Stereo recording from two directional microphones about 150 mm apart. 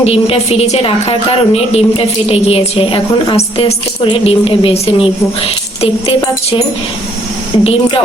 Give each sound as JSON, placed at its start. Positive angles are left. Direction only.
{"t": 0.0, "sound": "a woman's voice", "side_deg": 40}
{"t": 7.6, "sound": "a woman's voice", "side_deg": 40}